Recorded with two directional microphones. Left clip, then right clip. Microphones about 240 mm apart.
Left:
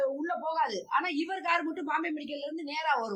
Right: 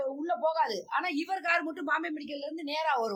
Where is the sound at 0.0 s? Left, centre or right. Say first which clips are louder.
Right 1 dB; centre.